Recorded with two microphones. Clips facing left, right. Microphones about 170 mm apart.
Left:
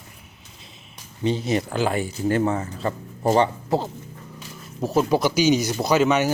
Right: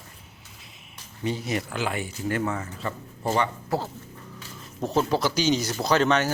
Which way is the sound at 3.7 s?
20° left (ahead or behind).